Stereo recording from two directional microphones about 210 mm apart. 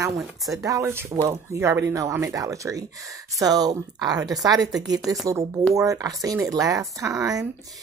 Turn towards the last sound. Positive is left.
turn(degrees=-15)  # may be behind; listen again after turning